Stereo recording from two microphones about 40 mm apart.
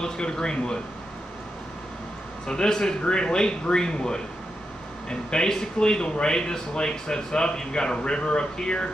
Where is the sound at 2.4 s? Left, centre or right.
Centre.